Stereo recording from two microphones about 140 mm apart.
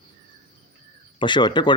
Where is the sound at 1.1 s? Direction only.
35° left (ahead or behind).